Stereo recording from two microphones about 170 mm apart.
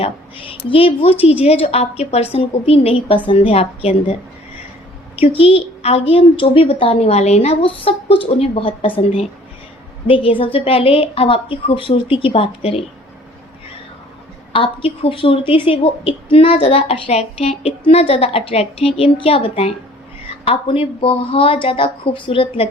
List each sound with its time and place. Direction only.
0.0 s a woman's voice: 30° left (ahead or behind)
5.1 s a woman's voice: 35° left (ahead or behind)
14.5 s a woman's voice: 30° left (ahead or behind)